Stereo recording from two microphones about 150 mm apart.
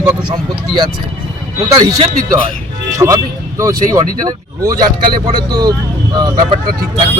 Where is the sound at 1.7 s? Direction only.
25° right (ahead or behind).